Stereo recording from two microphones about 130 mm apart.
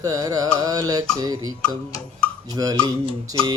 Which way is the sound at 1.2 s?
30° right (ahead or behind).